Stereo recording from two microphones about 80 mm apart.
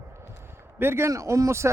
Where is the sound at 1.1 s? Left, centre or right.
Right.